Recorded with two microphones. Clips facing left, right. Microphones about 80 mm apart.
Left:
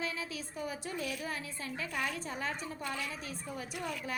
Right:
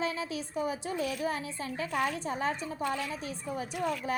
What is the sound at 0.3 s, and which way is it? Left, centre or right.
A woman's voice, right.